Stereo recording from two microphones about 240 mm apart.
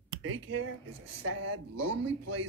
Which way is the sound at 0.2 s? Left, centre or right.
Right.